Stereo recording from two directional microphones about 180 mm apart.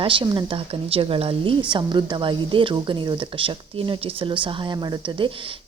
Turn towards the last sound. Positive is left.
turn(degrees=-30)  # may be behind; listen again after turning